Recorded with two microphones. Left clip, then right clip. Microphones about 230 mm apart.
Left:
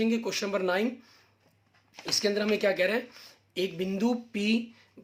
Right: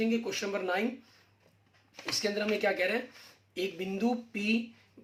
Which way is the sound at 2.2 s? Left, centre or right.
Left.